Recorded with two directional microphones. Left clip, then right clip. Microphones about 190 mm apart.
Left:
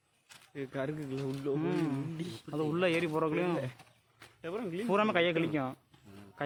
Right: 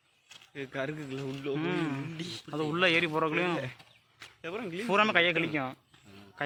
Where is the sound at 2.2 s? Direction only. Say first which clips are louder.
Right 3 dB; 15° left (ahead or behind).